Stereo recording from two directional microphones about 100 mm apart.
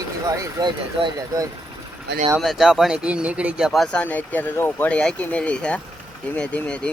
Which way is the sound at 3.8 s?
15° left (ahead or behind).